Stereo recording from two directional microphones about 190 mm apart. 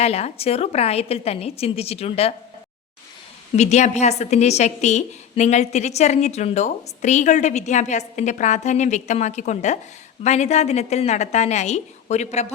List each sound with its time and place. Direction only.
0.0 s a woman's voice: 30° left (ahead or behind)
3.5 s a woman's voice: 35° left (ahead or behind)